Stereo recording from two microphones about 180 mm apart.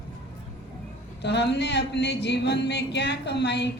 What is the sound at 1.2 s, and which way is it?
Speech, 70° left (ahead or behind).